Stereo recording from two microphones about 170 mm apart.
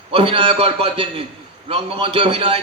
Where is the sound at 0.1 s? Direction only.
30° right (ahead or behind).